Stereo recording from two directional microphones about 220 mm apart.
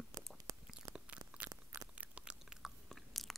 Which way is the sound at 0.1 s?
15° right (ahead or behind).